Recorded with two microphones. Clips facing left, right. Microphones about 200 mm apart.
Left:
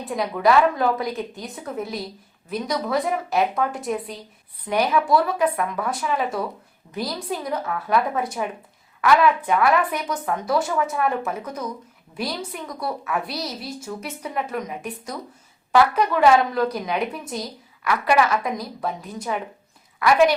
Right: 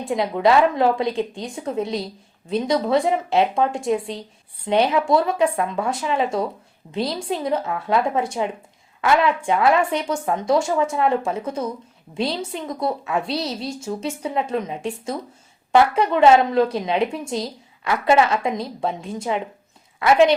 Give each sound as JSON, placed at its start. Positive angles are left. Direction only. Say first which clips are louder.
{"t": 0.0, "sound": "a woman's voice", "louder": "right 2 dB", "side_deg": -25}